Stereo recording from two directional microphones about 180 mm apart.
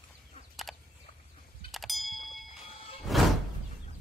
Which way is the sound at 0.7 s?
Centre (ahead or behind).